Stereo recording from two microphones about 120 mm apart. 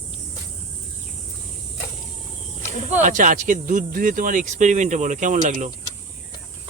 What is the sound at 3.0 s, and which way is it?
Speech, 90° right.